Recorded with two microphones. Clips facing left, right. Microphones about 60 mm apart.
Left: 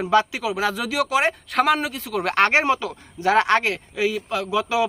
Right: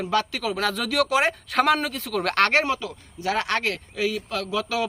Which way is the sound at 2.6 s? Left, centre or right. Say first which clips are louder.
Left 3 dB; left.